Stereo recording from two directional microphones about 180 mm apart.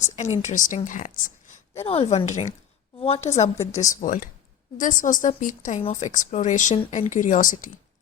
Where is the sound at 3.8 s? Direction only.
45° left (ahead or behind).